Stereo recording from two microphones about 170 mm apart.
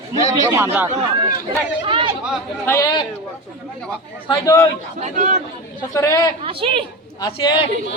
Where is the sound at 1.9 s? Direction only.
30° right (ahead or behind).